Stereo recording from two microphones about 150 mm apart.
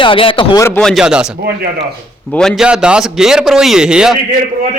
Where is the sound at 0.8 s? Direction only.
Centre (ahead or behind).